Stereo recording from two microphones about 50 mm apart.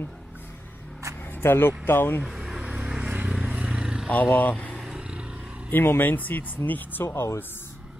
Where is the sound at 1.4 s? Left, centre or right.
Left.